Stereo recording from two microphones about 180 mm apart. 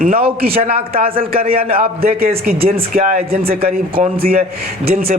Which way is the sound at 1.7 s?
55° right (ahead or behind).